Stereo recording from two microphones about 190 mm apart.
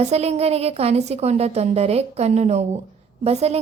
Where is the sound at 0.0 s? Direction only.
35° right (ahead or behind).